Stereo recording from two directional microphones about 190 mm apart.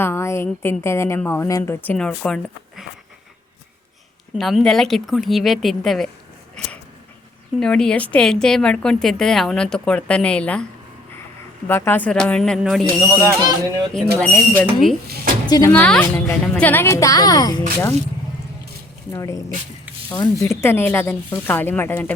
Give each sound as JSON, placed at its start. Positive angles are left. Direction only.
{"t": 0.0, "sound": "a woman's voice", "side_deg": 15}
{"t": 4.4, "sound": "a woman's voice", "side_deg": 0}
{"t": 7.6, "sound": "a woman's voice", "side_deg": 5}
{"t": 11.7, "sound": "a woman's voice", "side_deg": 10}
{"t": 13.1, "sound": "speech", "side_deg": -15}
{"t": 14.2, "sound": "a woman's voice", "side_deg": 5}
{"t": 15.0, "sound": "a sound", "side_deg": -55}
{"t": 15.4, "sound": "speech", "side_deg": 20}
{"t": 15.7, "sound": "a woman's voice", "side_deg": 10}
{"t": 19.1, "sound": "a woman's voice", "side_deg": 15}